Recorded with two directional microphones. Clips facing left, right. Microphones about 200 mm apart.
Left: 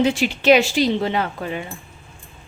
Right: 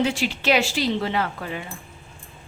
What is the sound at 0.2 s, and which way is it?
A woman's voice, 20° left (ahead or behind).